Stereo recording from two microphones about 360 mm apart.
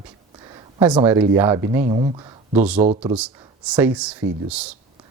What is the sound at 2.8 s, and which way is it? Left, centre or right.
Speech, centre.